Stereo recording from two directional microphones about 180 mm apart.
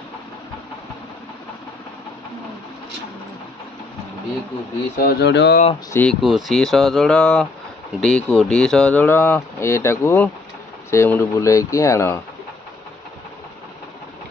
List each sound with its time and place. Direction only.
5.0 s speech: 75° left (ahead or behind)
5.9 s speech: centre (ahead or behind)